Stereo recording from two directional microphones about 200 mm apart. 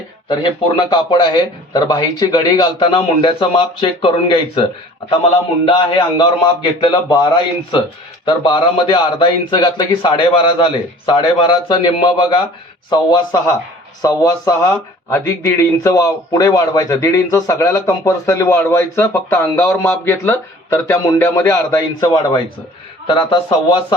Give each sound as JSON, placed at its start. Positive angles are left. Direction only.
{"t": 0.3, "sound": "a man's voice", "side_deg": 25}
{"t": 5.6, "sound": "a man's voice", "side_deg": 25}